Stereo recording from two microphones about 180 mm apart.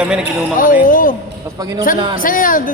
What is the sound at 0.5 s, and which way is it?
Speech, 50° left (ahead or behind).